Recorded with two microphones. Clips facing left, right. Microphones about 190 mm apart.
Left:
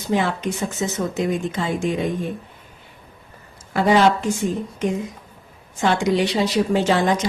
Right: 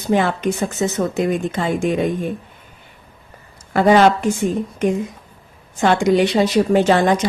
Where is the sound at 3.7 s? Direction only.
55° right (ahead or behind).